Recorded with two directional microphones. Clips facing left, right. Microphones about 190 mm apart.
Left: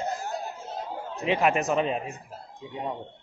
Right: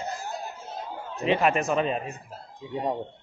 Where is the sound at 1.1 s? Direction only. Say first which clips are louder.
Right 1 dB; 15° left (ahead or behind).